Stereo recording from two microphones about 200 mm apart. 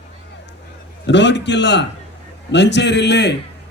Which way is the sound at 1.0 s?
65° left (ahead or behind).